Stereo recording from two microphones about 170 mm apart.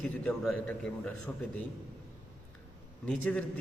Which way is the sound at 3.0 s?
10° left (ahead or behind).